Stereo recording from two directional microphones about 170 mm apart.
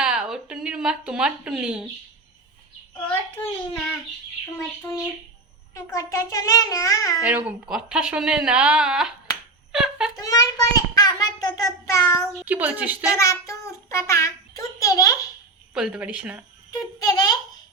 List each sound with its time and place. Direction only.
0.0 s speech: 5° right (ahead or behind)
3.1 s a child's voice: 10° left (ahead or behind)
7.3 s speech: 10° right (ahead or behind)
10.2 s a child's voice: 20° left (ahead or behind)
12.4 s speech: 10° right (ahead or behind)
13.1 s a child's voice: 15° left (ahead or behind)
15.7 s speech: 5° right (ahead or behind)
17.0 s a child's voice: 20° left (ahead or behind)